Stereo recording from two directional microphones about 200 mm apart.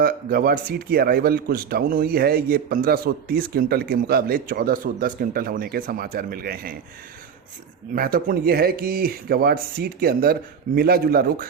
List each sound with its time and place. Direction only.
0.0 s speech: 50° right (ahead or behind)
7.9 s speech: 45° right (ahead or behind)